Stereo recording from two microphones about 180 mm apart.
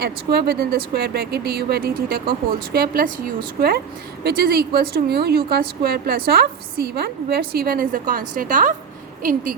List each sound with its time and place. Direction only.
0.0 s a woman's voice: 60° right (ahead or behind)
4.2 s a woman's voice: 60° right (ahead or behind)